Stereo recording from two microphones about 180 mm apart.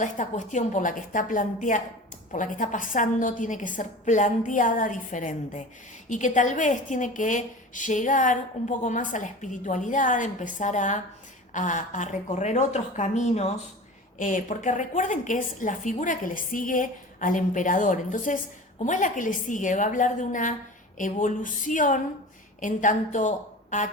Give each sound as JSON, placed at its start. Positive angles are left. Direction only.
{"t": 0.0, "sound": "a woman's voice", "side_deg": 45}